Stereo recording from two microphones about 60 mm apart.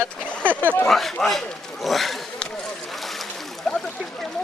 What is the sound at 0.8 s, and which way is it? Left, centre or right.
A man's voice, centre.